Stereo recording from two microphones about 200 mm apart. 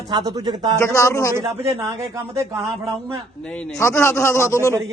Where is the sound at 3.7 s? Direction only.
15° left (ahead or behind).